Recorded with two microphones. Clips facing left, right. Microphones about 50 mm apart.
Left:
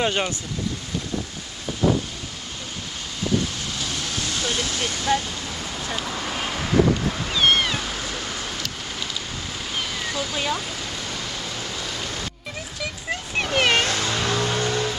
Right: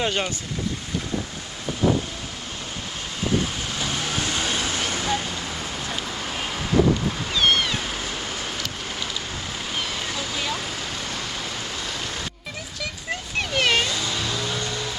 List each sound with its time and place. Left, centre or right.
0.0 s speech: centre
3.8 s vehicle: centre
5.0 s a sound: centre
5.9 s vehicle: centre
7.3 s cat: centre
9.7 s a sound: centre
10.3 s speech: centre
10.7 s vehicle: centre
13.4 s a sound: centre
13.8 s vehicle: left
14.2 s vehicle: left